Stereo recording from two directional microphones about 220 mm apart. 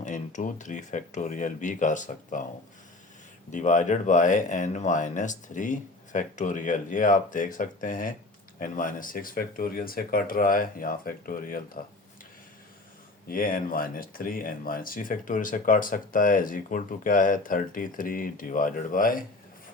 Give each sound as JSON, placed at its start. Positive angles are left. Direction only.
{"t": 0.0, "sound": "speech", "side_deg": 35}
{"t": 3.5, "sound": "speech", "side_deg": 35}
{"t": 13.3, "sound": "speech", "side_deg": 40}